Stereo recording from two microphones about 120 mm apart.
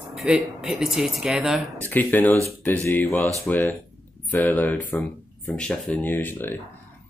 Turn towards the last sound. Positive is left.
turn(degrees=15)  # may be behind; listen again after turning